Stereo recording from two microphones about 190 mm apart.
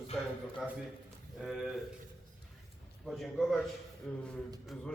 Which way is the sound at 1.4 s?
Centre (ahead or behind).